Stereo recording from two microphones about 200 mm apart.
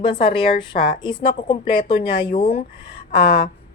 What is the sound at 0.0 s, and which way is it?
A woman's voice, 25° left (ahead or behind).